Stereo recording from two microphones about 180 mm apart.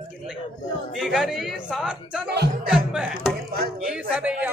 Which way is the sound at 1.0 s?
Centre (ahead or behind).